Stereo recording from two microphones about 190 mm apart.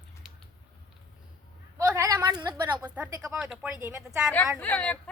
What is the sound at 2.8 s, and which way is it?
Speech, 5° right (ahead or behind).